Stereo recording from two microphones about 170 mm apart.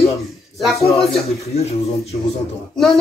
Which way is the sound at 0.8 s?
35° left (ahead or behind).